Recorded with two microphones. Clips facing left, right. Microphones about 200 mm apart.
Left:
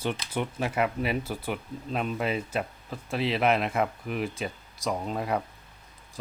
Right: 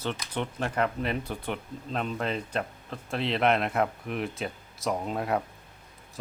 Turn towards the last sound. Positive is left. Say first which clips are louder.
# right 1 dB
turn(degrees=0)  # may be behind; listen again after turning